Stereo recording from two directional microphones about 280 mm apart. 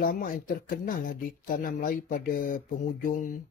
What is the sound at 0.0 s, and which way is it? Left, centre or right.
Speech, left.